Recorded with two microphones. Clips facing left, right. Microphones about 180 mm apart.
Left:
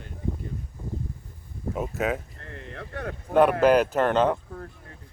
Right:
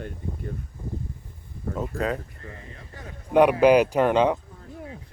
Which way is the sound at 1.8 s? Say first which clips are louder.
Even; 5° left (ahead or behind).